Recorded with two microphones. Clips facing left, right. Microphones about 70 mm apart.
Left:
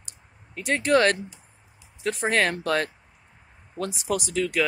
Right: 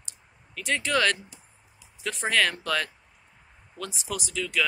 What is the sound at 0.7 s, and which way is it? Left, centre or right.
Speech, left.